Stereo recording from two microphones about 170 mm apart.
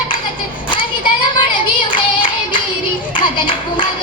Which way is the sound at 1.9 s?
30° left (ahead or behind).